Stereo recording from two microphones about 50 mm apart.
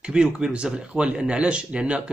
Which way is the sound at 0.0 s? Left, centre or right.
Centre.